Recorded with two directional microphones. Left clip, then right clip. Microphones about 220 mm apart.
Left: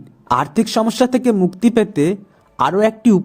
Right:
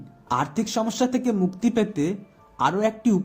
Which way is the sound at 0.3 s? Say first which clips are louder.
Left 8 dB; 45° left (ahead or behind).